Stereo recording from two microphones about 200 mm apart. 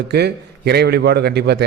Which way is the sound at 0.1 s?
55° right (ahead or behind).